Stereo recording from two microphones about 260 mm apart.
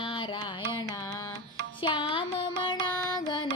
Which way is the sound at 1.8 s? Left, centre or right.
Centre.